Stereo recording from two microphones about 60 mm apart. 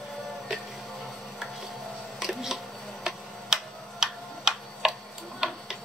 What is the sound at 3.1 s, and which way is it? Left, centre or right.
Tick-tock, centre.